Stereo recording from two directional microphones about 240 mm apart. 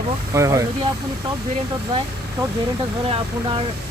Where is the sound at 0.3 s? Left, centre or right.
Centre.